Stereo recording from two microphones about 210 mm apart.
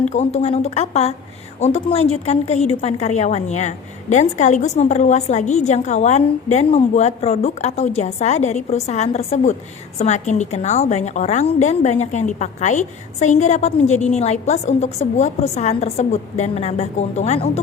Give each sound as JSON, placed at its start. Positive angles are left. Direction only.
{"t": 0.1, "sound": "a woman's voice", "side_deg": 30}